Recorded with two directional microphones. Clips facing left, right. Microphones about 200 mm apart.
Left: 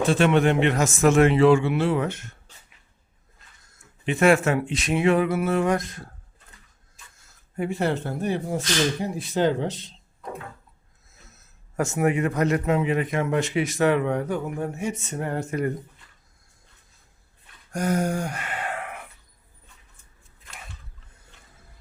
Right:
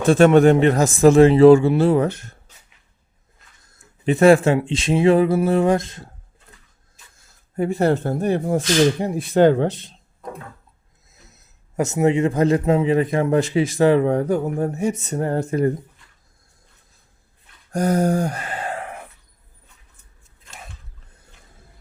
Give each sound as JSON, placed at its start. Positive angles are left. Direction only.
{"t": 0.1, "sound": "speech", "side_deg": -45}
{"t": 4.0, "sound": "speech", "side_deg": -35}
{"t": 7.5, "sound": "speech", "side_deg": -40}
{"t": 11.1, "sound": "speech", "side_deg": -15}
{"t": 17.7, "sound": "a sound", "side_deg": -35}